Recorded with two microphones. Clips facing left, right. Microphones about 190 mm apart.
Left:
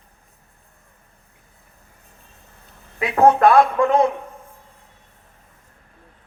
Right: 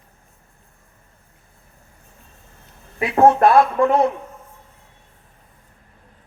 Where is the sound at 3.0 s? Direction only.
30° right (ahead or behind).